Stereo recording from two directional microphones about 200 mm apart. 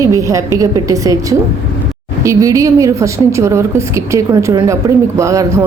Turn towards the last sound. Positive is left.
turn(degrees=-15)  # may be behind; listen again after turning